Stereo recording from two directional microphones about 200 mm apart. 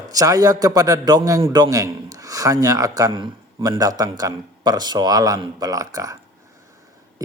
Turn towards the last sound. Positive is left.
turn(degrees=-15)  # may be behind; listen again after turning